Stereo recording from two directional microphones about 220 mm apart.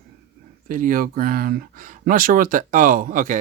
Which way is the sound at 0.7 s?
40° right (ahead or behind).